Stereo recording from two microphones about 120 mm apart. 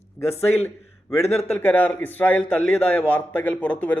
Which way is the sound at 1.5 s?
15° left (ahead or behind).